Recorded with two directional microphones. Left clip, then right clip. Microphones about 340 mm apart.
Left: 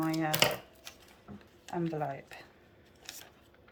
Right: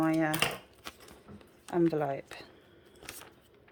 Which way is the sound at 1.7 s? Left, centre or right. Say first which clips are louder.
Right 6 dB; centre.